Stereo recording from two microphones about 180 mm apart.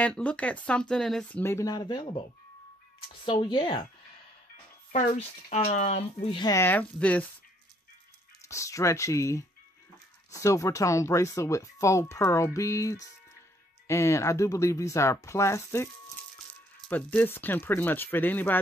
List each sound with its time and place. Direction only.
0.0 s speech: 5° left (ahead or behind)
1.4 s speech: 15° left (ahead or behind)
3.3 s speech: 25° left (ahead or behind)
4.9 s speech: 40° left (ahead or behind)
6.5 s speech: 10° left (ahead or behind)
8.5 s speech: 15° left (ahead or behind)
16.9 s speech: 10° left (ahead or behind)